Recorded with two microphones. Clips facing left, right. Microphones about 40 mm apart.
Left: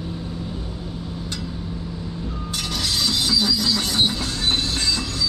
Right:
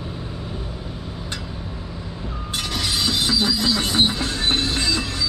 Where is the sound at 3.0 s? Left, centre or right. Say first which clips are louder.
Even; centre.